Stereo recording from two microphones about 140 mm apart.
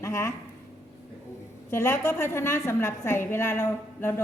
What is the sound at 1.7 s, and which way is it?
A woman's voice, 15° left (ahead or behind).